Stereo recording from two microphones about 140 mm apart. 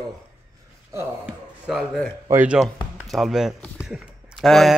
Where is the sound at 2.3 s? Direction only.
10° right (ahead or behind).